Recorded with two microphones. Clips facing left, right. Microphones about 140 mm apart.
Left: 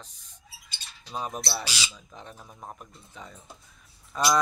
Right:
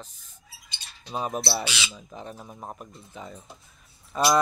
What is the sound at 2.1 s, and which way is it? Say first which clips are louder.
Speech: right 6 dB; 5° right (ahead or behind).